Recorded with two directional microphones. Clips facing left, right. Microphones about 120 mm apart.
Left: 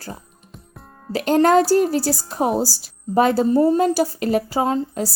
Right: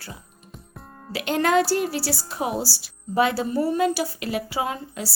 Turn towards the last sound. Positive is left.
turn(degrees=40)  # may be behind; listen again after turning